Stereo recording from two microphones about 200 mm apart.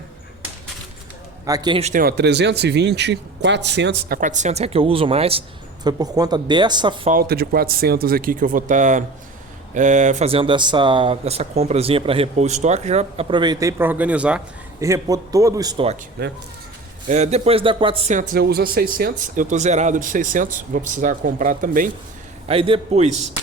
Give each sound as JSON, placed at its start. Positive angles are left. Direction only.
{"t": 1.5, "sound": "speech", "side_deg": -20}
{"t": 1.8, "sound": "speech", "side_deg": -45}
{"t": 4.2, "sound": "speech", "side_deg": -40}
{"t": 7.1, "sound": "a man's voice", "side_deg": -50}
{"t": 16.2, "sound": "speech", "side_deg": -50}
{"t": 17.1, "sound": "speech", "side_deg": -35}
{"t": 22.4, "sound": "speech", "side_deg": -25}